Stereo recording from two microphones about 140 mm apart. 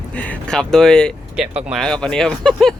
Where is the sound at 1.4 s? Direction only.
5° right (ahead or behind).